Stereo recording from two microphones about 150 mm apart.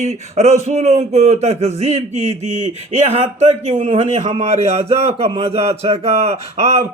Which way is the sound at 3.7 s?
40° right (ahead or behind).